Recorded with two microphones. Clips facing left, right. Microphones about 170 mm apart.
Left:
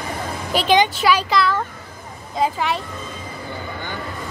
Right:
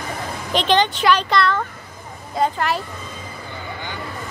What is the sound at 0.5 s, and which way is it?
Speech, 10° left (ahead or behind).